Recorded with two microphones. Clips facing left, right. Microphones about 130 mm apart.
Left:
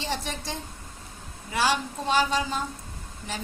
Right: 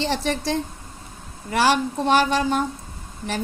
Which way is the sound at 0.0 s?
75° right (ahead or behind).